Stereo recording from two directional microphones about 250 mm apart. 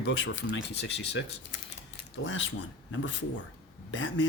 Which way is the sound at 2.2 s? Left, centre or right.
Left.